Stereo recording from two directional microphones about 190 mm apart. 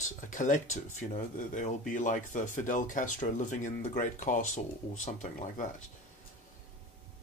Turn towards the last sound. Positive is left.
turn(degrees=40)  # may be behind; listen again after turning